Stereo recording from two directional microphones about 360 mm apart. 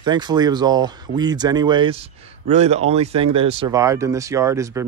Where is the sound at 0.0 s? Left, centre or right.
Centre.